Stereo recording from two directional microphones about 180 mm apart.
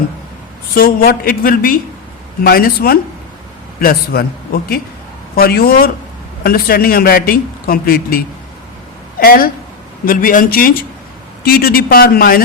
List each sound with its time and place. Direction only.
0.7 s a woman's voice: 55° left (ahead or behind)